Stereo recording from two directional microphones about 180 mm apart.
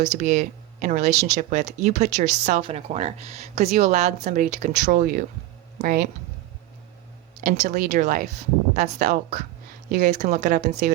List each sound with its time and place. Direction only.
0.0 s a woman's voice: 40° right (ahead or behind)
7.4 s a woman's voice: 40° right (ahead or behind)